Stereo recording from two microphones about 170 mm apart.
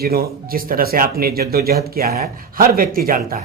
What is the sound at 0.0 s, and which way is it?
Speech, 65° right (ahead or behind).